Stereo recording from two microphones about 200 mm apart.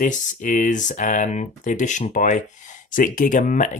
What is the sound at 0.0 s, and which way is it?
Speech, 40° left (ahead or behind).